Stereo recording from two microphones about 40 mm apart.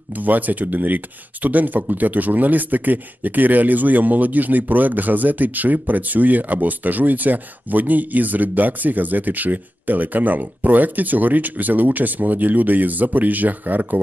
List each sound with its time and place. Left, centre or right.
0.2 s speech: right